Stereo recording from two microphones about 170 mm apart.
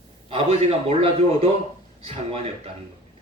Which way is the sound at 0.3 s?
35° right (ahead or behind).